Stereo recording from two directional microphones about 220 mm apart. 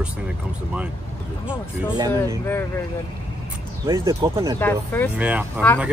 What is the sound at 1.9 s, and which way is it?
Speech, 15° right (ahead or behind).